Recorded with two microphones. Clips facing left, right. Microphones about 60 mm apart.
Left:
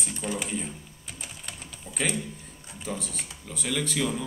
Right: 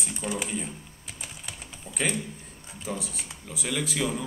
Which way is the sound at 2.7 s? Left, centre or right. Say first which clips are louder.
Even; centre.